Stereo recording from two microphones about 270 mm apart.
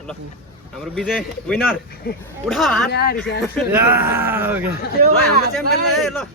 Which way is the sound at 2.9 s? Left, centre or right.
Left.